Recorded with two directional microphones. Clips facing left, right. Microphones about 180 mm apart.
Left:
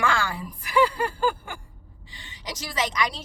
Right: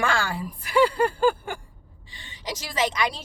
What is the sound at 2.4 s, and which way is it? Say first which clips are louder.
Speech: right 3 dB; 30° right (ahead or behind).